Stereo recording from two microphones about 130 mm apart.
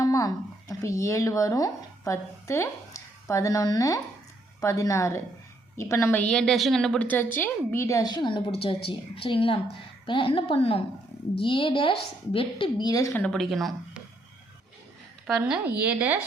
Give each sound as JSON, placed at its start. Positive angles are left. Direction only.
{"t": 0.0, "sound": "a woman's voice", "side_deg": 25}
{"t": 12.9, "sound": "a woman's voice", "side_deg": 25}
{"t": 13.2, "sound": "a woman's voice", "side_deg": 0}
{"t": 15.3, "sound": "a woman's voice", "side_deg": -5}